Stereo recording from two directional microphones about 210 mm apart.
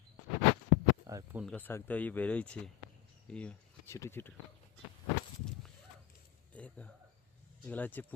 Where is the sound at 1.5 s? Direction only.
10° left (ahead or behind).